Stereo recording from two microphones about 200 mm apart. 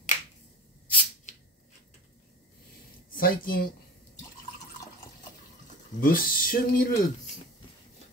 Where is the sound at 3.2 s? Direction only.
45° left (ahead or behind).